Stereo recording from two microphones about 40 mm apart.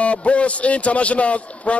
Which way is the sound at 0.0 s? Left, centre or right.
Left.